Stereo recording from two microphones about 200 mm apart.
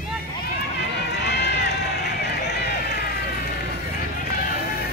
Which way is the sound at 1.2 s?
55° left (ahead or behind).